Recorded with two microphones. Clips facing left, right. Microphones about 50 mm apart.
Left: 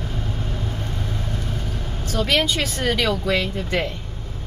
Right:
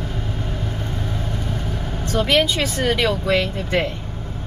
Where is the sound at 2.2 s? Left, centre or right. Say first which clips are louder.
Right 2 dB; centre.